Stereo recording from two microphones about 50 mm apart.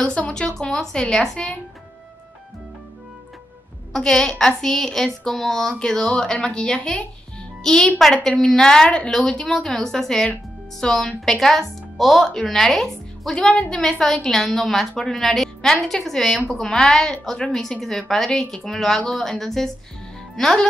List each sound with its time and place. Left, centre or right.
0.2 s a sound: centre
0.6 s speech: centre
3.9 s a woman's voice: centre
13.4 s a woman's voice: centre